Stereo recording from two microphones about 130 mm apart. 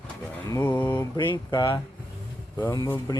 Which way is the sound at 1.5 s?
40° left (ahead or behind).